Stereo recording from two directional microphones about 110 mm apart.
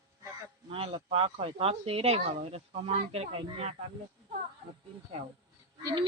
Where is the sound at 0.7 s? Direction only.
55° right (ahead or behind).